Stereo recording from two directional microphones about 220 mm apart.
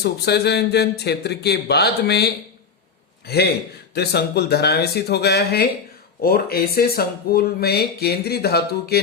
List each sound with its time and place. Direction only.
0.0 s speech: 50° left (ahead or behind)